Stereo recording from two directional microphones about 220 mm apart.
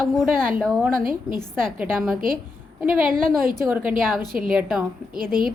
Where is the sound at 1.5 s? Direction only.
Centre (ahead or behind).